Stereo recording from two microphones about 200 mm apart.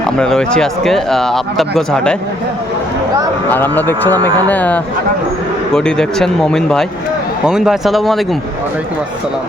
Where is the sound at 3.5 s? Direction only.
10° left (ahead or behind).